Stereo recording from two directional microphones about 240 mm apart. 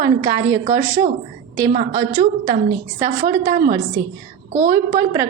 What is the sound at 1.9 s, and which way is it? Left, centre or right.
Speech, centre.